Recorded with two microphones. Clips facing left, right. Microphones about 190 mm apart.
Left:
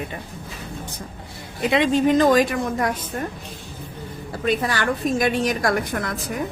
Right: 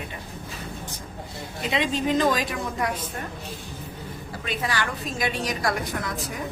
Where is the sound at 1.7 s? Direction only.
55° left (ahead or behind).